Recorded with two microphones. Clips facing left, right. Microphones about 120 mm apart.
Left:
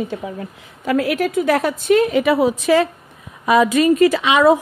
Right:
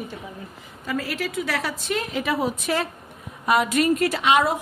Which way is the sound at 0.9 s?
60° left (ahead or behind).